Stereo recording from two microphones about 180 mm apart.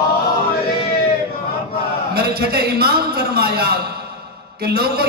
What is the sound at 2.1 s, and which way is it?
A man's voice, 60° right (ahead or behind).